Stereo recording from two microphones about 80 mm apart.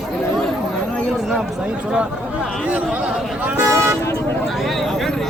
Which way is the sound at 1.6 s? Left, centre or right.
Centre.